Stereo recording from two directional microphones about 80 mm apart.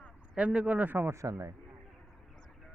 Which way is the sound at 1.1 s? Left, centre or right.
Right.